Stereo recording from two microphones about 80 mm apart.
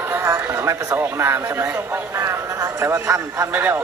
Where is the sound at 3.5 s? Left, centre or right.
Right.